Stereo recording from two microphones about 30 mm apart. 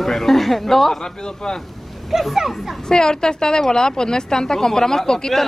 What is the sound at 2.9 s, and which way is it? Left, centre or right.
A woman's voice, left.